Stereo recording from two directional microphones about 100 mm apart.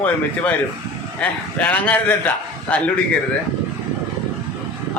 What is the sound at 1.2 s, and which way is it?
A man's voice, 15° left (ahead or behind).